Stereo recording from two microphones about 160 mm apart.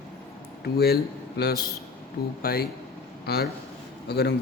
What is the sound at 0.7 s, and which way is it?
A man's voice, 80° left.